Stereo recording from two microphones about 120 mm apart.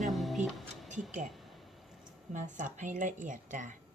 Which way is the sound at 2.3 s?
90° right.